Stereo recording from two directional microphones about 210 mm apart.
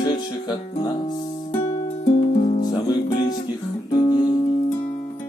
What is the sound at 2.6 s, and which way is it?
Music, 20° left (ahead or behind).